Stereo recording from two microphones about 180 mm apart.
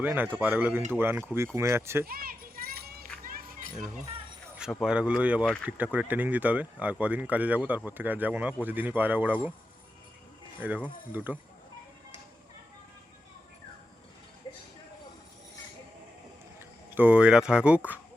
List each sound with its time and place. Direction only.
0.0 s speech: 10° right (ahead or behind)
2.0 s children playing: 55° right (ahead or behind)
3.2 s a sound: 50° right (ahead or behind)
4.5 s speech: 5° right (ahead or behind)
10.6 s speech: 10° right (ahead or behind)
16.6 s speech: 10° right (ahead or behind)